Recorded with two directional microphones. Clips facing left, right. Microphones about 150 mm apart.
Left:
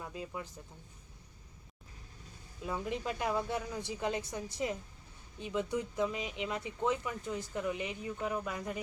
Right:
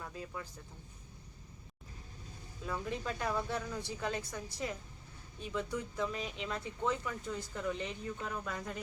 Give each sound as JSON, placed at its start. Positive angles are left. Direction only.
{"t": 0.0, "sound": "speech", "side_deg": 15}
{"t": 2.6, "sound": "speech", "side_deg": 15}